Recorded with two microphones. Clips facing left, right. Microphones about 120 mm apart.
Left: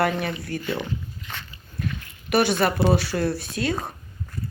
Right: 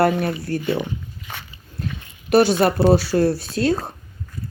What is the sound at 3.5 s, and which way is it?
Speech, 35° right (ahead or behind).